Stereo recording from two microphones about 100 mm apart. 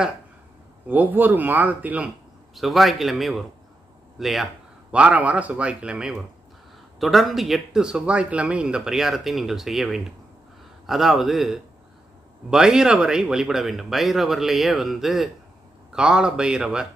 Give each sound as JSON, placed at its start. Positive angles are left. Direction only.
{"t": 0.8, "sound": "a man's voice", "side_deg": -20}
{"t": 2.5, "sound": "speech", "side_deg": 0}
{"t": 4.9, "sound": "a man's voice", "side_deg": -15}